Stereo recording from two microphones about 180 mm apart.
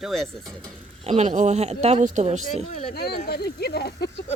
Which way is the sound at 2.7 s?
40° left (ahead or behind).